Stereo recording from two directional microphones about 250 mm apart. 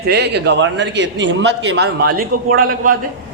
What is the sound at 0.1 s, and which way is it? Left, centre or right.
A man's voice, right.